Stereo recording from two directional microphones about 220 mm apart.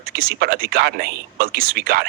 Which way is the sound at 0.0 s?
45° right (ahead or behind).